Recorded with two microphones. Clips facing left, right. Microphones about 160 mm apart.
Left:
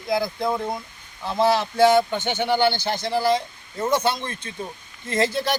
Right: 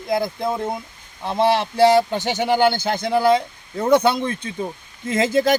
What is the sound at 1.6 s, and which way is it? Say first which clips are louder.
Speech: right 3 dB; 35° right (ahead or behind).